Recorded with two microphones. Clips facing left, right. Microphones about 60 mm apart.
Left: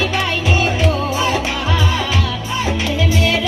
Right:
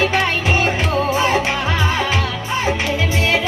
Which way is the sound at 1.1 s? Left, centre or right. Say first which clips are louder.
Right 2 dB; right.